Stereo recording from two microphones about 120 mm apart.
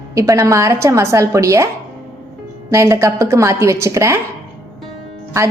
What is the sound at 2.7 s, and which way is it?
A woman's voice, 25° right (ahead or behind).